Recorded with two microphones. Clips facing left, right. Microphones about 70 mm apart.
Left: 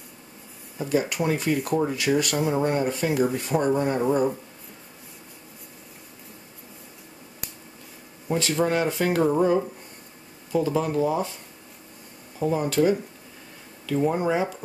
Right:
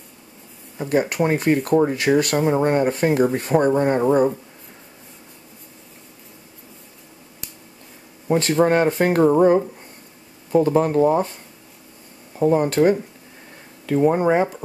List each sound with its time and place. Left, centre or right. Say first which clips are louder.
0.7 s speech: right 4 dB; right
8.3 s speech: right 6 dB; right
10.5 s speech: right 7 dB; right
12.4 s speech: right 6 dB; right
13.9 s speech: right 6 dB; right